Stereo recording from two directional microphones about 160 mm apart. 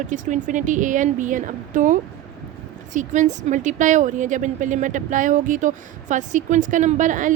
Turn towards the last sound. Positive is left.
turn(degrees=-55)  # may be behind; listen again after turning